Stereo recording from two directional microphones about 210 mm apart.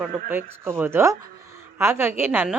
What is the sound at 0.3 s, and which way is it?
A woman's voice, 10° right (ahead or behind).